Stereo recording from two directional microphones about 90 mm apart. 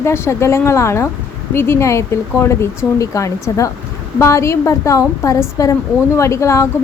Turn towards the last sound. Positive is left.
turn(degrees=35)  # may be behind; listen again after turning